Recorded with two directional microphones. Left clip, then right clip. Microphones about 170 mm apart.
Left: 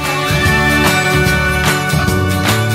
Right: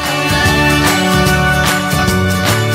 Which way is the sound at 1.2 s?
Centre (ahead or behind).